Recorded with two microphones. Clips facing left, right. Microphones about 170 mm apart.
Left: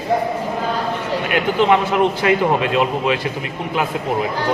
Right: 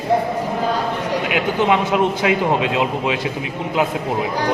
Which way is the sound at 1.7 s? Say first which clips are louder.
Even; 15° right (ahead or behind).